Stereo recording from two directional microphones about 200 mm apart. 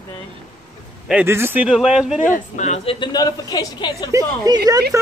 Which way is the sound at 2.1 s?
35° left (ahead or behind).